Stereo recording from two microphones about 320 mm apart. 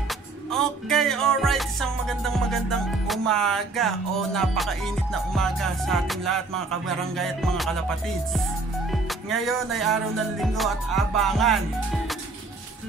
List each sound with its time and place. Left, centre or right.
0.1 s music: centre
8.9 s music: centre